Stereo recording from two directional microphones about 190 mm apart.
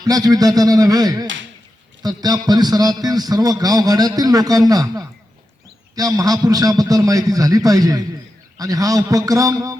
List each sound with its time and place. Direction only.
0.0 s a man's voice: 20° right (ahead or behind)